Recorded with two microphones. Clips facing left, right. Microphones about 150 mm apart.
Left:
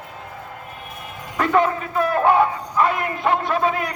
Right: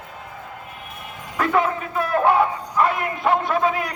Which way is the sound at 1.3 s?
5° right (ahead or behind).